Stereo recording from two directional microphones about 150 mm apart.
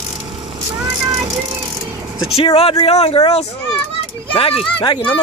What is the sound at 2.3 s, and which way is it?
Speech, 40° left (ahead or behind).